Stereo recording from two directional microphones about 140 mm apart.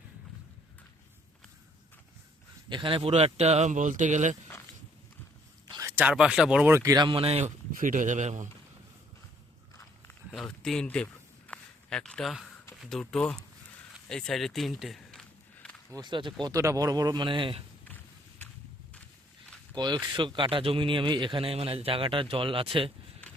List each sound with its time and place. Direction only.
2.6 s a man's voice: 35° right (ahead or behind); by 4.4 s 60° right (ahead or behind)
5.6 s a sound: 30° right (ahead or behind)
6.0 s speech: 10° right (ahead or behind)
6.7 s a man's voice: 25° right (ahead or behind); by 7.5 s 45° right (ahead or behind)
7.8 s speech: 65° right (ahead or behind)
10.3 s a sound: 5° left (ahead or behind)
12.8 s speech: 5° left (ahead or behind)
14.1 s a sound: 5° left (ahead or behind)
15.9 s speech: 30° right (ahead or behind)
19.7 s a man's voice: 35° right (ahead or behind)